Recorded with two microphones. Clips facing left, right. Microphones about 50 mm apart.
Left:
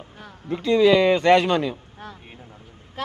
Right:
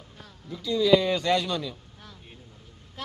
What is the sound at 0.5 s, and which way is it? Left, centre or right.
Speech, left.